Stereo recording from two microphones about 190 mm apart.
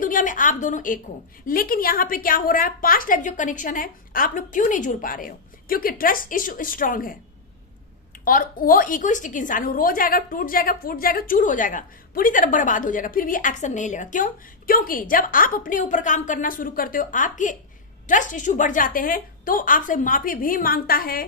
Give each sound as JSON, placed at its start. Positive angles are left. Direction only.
{"t": 0.0, "sound": "a sound", "side_deg": 45}
{"t": 1.5, "sound": "a woman's voice", "side_deg": 50}
{"t": 8.2, "sound": "a woman's voice", "side_deg": 50}